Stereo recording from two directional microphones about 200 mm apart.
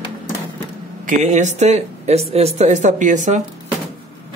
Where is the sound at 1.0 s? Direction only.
40° right (ahead or behind).